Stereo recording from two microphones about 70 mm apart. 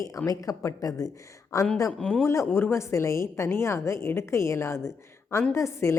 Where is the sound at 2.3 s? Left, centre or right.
Left.